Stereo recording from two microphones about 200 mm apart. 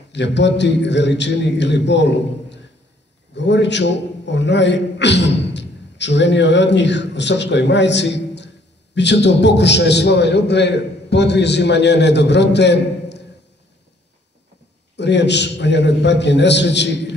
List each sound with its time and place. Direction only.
0.1 s a man's voice: 60° left (ahead or behind)
15.0 s a man's voice: 60° left (ahead or behind)